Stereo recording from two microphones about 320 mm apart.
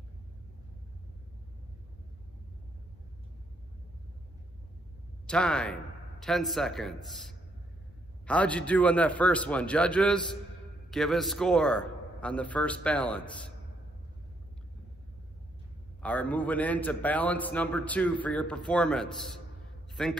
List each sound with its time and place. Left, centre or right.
5.2 s a man's voice: centre
16.0 s a man's voice: centre